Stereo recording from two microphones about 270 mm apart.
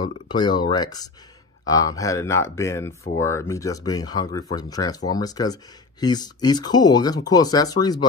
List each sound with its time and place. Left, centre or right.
0.0 s speech: centre